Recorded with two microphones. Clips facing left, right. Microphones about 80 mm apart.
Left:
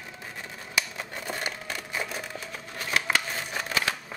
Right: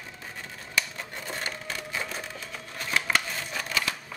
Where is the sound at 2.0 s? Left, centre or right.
Centre.